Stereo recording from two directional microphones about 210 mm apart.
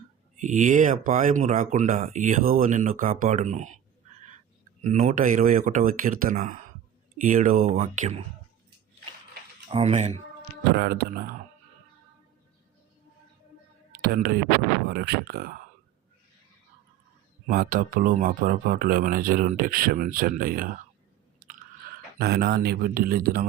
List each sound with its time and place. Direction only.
0.3 s speech: 35° right (ahead or behind)
4.8 s speech: 35° right (ahead or behind)
9.6 s speech: 30° right (ahead or behind)
10.8 s speech: 45° right (ahead or behind)
13.9 s a sound: 45° right (ahead or behind)
14.8 s speech: 50° right (ahead or behind)
17.5 s speech: 45° right (ahead or behind)
22.2 s speech: 50° right (ahead or behind)